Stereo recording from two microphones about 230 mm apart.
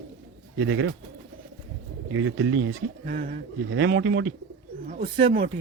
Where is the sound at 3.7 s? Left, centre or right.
Right.